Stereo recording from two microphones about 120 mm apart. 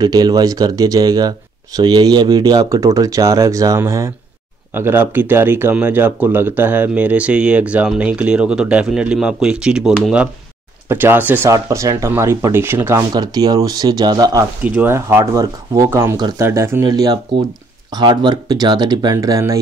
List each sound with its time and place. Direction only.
0.0 s speech: 35° right (ahead or behind); by 9.9 s 5° right (ahead or behind)
10.9 s speech: 20° right (ahead or behind)
13.1 s speech: 35° right (ahead or behind)
14.6 s speech: 15° right (ahead or behind)
16.8 s speech: 30° right (ahead or behind)